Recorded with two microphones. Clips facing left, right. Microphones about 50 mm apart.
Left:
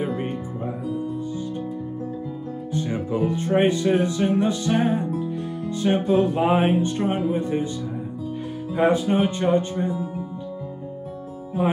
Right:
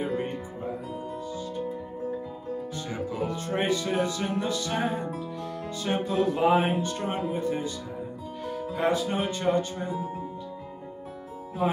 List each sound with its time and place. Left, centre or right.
2.7 s speech: left
8.7 s speech: left